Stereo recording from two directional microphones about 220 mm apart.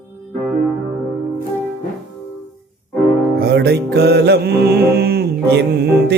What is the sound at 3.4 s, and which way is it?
Music, 45° right (ahead or behind).